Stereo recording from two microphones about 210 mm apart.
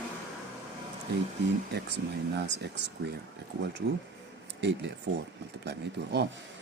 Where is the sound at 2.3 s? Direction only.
55° right (ahead or behind).